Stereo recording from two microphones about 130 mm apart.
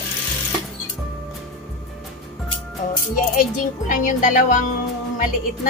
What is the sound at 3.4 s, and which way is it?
Speech, 90° left.